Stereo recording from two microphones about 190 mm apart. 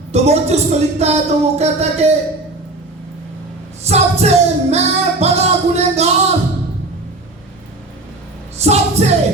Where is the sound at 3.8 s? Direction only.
35° right (ahead or behind).